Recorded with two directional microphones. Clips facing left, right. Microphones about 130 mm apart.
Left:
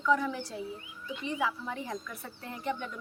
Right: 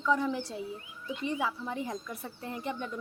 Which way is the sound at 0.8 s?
Centre (ahead or behind).